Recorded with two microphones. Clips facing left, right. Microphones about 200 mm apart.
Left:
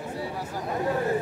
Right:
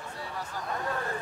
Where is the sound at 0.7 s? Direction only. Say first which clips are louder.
Left 8 dB; 20° left (ahead or behind).